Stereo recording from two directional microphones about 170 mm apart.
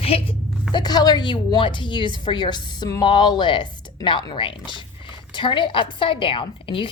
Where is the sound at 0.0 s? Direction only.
35° left (ahead or behind).